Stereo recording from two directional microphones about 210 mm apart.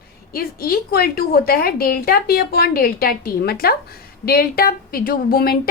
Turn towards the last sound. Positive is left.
turn(degrees=45)  # may be behind; listen again after turning